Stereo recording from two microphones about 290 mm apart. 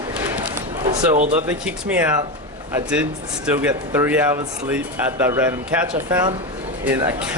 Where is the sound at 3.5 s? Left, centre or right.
Centre.